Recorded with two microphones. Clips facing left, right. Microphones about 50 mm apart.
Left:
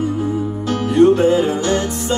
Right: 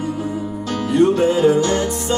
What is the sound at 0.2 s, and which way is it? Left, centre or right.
Music, left.